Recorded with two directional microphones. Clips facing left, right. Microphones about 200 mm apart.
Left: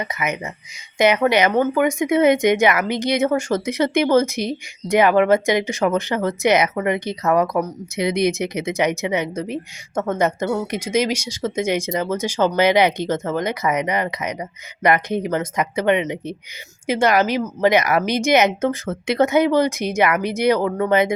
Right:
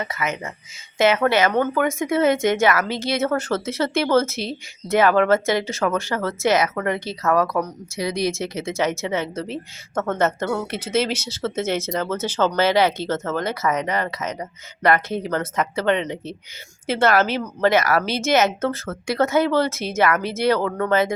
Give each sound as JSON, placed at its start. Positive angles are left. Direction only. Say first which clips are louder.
{"t": 0.0, "sound": "speech", "louder": "left 1 dB", "side_deg": 20}